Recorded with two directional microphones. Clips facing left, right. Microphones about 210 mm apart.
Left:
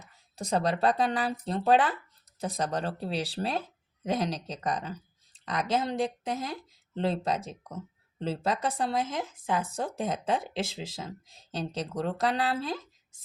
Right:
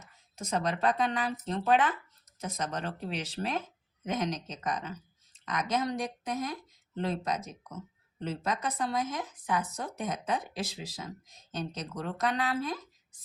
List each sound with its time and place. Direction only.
0.0 s speech: 35° left (ahead or behind)